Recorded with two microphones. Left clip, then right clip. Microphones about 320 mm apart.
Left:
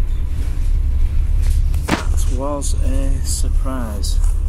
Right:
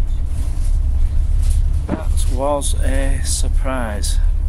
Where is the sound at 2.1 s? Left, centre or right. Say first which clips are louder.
Right 5 dB; right.